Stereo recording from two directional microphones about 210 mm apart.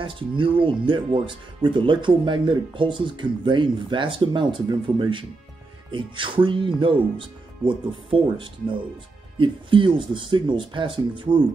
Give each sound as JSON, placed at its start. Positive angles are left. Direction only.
{"t": 0.0, "sound": "speech", "side_deg": -25}